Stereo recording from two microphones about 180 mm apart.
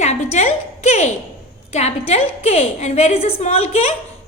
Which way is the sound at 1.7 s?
35° left (ahead or behind).